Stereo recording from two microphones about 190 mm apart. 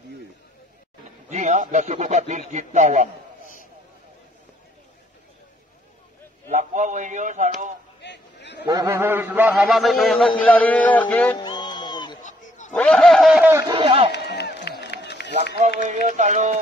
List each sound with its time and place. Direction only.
1.3 s speech: 40° right (ahead or behind)
6.5 s speech: 40° right (ahead or behind)
8.0 s a sound: 65° left (ahead or behind)
8.6 s a man's voice: 15° right (ahead or behind); by 11.3 s 10° left (ahead or behind)
11.3 s music: 20° left (ahead or behind)
12.2 s a sound: 40° left (ahead or behind)
12.7 s a man's voice: 5° left (ahead or behind)
13.5 s speech: 15° right (ahead or behind)
13.7 s speech: 30° right (ahead or behind)
14.1 s run: 60° left (ahead or behind)
15.8 s speech: 40° right (ahead or behind)